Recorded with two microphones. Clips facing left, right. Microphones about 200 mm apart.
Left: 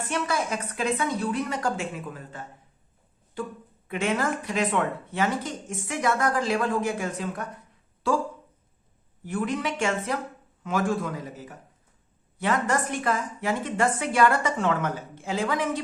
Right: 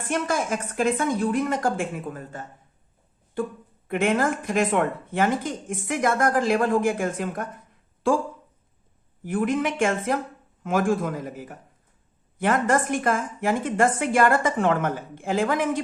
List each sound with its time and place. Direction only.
0.0 s speech: 50° right (ahead or behind)
3.8 s speech: 50° right (ahead or behind)
9.2 s speech: 50° right (ahead or behind)